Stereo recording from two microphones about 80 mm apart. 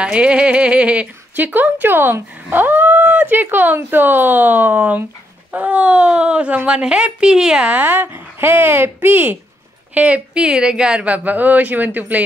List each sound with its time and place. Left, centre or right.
0.0 s speech: centre